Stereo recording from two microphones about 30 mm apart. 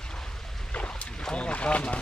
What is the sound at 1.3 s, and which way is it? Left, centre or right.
Boat, left.